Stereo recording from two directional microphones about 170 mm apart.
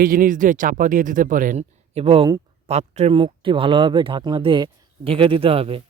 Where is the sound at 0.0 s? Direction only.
55° right (ahead or behind); by 2.4 s 30° right (ahead or behind).